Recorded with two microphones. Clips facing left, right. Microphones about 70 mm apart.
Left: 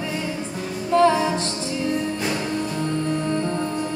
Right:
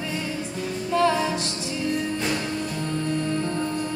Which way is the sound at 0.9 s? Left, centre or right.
Centre.